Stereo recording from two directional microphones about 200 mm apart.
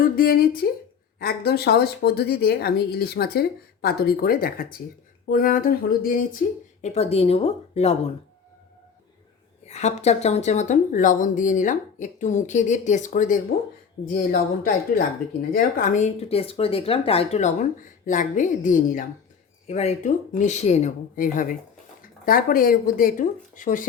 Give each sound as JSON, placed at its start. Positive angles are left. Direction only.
{"t": 0.0, "sound": "speech", "side_deg": 45}
{"t": 6.8, "sound": "speech", "side_deg": 30}
{"t": 9.6, "sound": "speech", "side_deg": 35}